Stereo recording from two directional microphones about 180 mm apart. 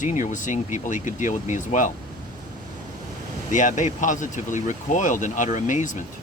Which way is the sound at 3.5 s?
45° left (ahead or behind).